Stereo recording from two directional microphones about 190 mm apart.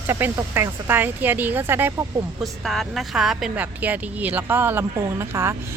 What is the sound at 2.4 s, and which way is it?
Speech, centre (ahead or behind).